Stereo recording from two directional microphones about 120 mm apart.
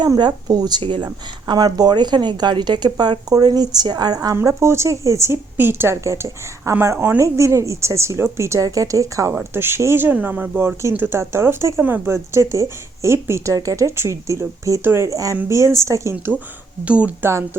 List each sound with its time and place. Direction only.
0.0 s speech: 35° right (ahead or behind)
4.4 s speech: 25° right (ahead or behind)
16.8 s speech: 10° right (ahead or behind)
17.2 s speech: 20° right (ahead or behind)